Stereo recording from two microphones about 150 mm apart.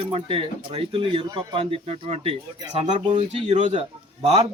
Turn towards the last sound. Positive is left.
turn(degrees=-40)  # may be behind; listen again after turning